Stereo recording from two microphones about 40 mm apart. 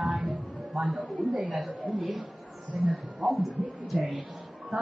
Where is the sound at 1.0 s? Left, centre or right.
Right.